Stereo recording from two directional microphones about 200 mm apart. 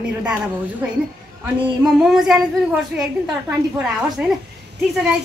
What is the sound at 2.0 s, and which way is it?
A woman's voice, centre (ahead or behind).